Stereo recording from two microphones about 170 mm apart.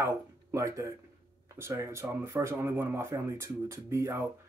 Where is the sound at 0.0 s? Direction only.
15° right (ahead or behind).